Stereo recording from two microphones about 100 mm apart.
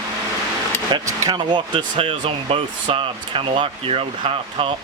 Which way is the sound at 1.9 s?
70° right (ahead or behind).